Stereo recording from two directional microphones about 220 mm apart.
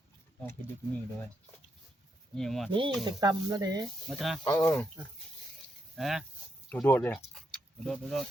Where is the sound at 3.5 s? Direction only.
15° right (ahead or behind).